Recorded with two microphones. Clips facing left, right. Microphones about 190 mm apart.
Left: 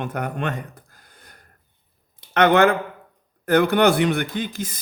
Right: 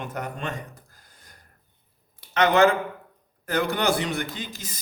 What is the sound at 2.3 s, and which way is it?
A man's voice, 60° left (ahead or behind).